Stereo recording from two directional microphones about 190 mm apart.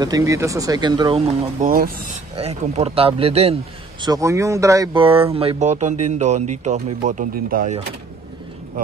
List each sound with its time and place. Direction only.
0.0 s speech: 20° right (ahead or behind)
1.7 s speech: 50° right (ahead or behind)
2.3 s speech: 35° right (ahead or behind)
4.0 s speech: 20° right (ahead or behind)
5.0 s speech: 30° right (ahead or behind)